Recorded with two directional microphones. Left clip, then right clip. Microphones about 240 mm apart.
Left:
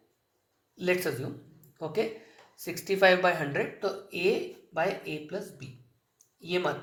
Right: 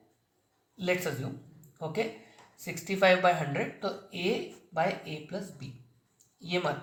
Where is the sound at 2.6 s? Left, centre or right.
Left.